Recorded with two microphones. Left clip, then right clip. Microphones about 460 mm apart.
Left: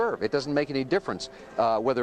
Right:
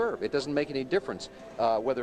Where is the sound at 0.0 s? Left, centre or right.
Left.